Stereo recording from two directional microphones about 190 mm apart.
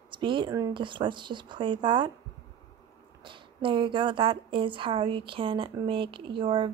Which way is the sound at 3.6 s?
25° right (ahead or behind).